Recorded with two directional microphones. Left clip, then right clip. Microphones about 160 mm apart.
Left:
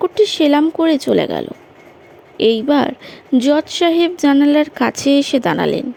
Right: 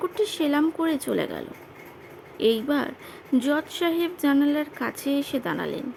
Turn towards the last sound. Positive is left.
turn(degrees=40)  # may be behind; listen again after turning